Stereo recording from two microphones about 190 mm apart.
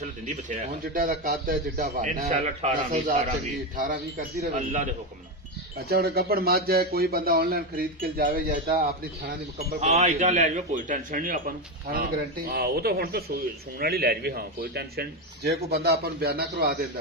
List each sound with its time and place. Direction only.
0.0 s a man's voice: 40° right (ahead or behind)
9.8 s a man's voice: 35° right (ahead or behind); by 16.7 s 55° right (ahead or behind)